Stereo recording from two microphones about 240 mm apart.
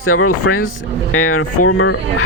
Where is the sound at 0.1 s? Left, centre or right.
Left.